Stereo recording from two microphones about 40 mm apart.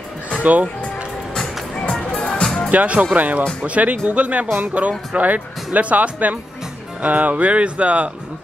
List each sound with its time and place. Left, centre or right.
0.4 s speech: right
1.3 s music: centre
2.7 s speech: right